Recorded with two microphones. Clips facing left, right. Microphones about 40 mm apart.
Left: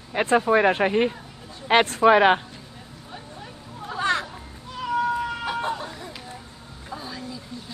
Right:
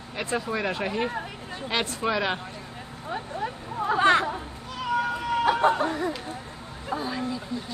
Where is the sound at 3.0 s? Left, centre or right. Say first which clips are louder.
Right 10 dB; right.